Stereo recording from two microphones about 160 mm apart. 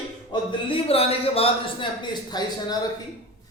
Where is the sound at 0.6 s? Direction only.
35° left (ahead or behind).